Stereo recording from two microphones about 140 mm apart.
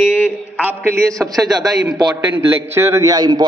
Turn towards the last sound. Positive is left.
turn(degrees=-30)  # may be behind; listen again after turning